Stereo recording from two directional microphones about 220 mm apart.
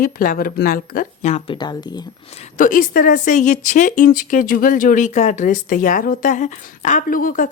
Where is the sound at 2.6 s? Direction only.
40° left (ahead or behind).